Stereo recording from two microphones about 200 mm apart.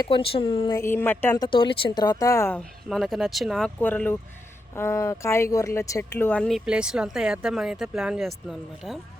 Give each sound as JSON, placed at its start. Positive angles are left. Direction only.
{"t": 0.0, "sound": "speech", "side_deg": 25}
{"t": 0.8, "sound": "speech", "side_deg": 10}
{"t": 1.5, "sound": "speech", "side_deg": 25}
{"t": 2.6, "sound": "speech", "side_deg": 0}